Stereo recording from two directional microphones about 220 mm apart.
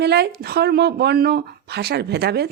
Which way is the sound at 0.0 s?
50° right (ahead or behind).